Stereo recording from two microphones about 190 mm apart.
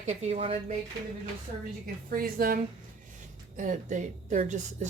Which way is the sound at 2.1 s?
50° right (ahead or behind).